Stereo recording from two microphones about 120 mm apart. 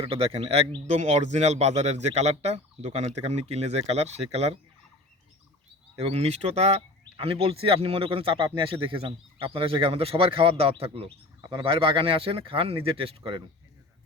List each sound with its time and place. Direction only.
0.0 s speech: 55° right (ahead or behind)
0.9 s speech: 65° right (ahead or behind)
6.0 s speech: 55° right (ahead or behind)